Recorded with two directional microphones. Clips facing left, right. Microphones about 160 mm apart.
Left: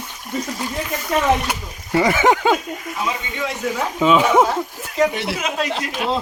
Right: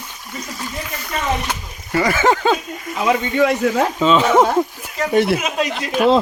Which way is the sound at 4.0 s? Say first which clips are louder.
Left 1 dB; 10° left (ahead or behind).